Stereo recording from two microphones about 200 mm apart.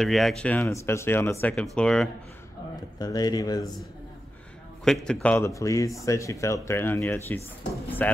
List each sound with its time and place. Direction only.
0.0 s speech: centre (ahead or behind)
3.0 s speech: 20° left (ahead or behind)
4.8 s speech: 5° left (ahead or behind)